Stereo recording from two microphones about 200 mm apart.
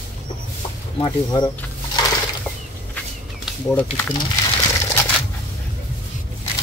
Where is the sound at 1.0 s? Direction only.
20° left (ahead or behind).